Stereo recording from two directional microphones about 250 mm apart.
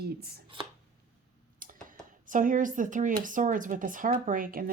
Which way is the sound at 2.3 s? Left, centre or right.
Right.